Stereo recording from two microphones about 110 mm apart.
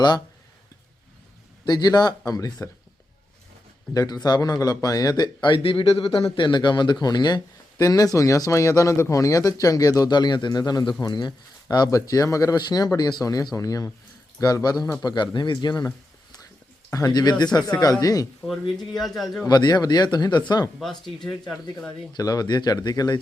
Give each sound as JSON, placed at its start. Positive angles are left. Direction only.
{"t": 1.6, "sound": "a man's voice", "side_deg": 40}
{"t": 3.9, "sound": "a man's voice", "side_deg": 35}
{"t": 16.9, "sound": "a man's voice", "side_deg": 35}
{"t": 18.9, "sound": "speech", "side_deg": 0}
{"t": 19.5, "sound": "a man's voice", "side_deg": 40}
{"t": 20.7, "sound": "speech", "side_deg": 0}
{"t": 21.8, "sound": "a man's voice", "side_deg": 35}